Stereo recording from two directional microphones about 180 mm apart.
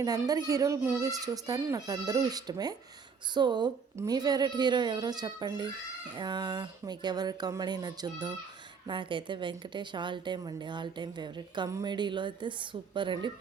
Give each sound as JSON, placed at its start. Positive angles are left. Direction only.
{"t": 0.0, "sound": "a woman's voice", "side_deg": -20}